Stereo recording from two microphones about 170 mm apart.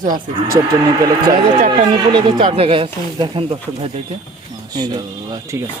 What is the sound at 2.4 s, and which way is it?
Speech, 35° right (ahead or behind).